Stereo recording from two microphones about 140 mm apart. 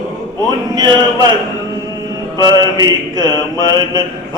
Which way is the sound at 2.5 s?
30° right (ahead or behind).